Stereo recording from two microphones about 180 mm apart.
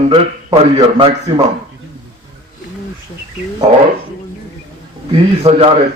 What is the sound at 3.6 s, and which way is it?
Speech, 30° right (ahead or behind).